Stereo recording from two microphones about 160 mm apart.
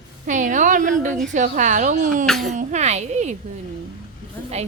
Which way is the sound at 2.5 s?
50° right (ahead or behind).